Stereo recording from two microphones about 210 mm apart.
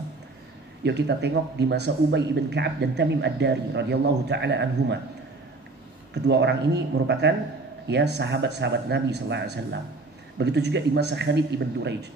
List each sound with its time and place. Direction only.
0.8 s speech: 55° right (ahead or behind)
6.1 s speech: 55° right (ahead or behind)